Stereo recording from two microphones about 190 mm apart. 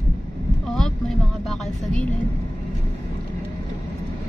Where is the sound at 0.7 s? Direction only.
Centre (ahead or behind).